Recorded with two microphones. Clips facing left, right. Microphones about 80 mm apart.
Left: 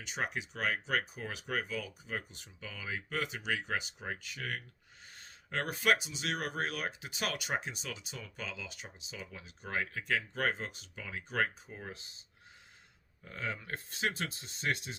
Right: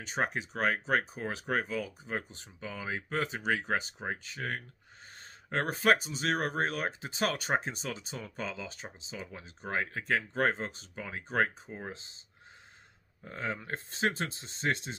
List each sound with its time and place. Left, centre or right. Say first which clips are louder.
0.0 s speech: right 5 dB; right
13.2 s speech: right 3 dB; right